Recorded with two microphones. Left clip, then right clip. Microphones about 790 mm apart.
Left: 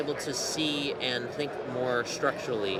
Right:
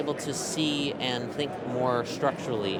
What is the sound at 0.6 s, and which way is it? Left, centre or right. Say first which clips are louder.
Speech: right 3 dB; right.